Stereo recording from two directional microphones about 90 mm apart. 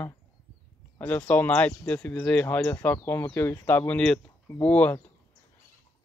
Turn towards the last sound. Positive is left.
turn(degrees=15)  # may be behind; listen again after turning